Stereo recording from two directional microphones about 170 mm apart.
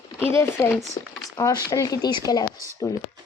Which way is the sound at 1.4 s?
20° left (ahead or behind).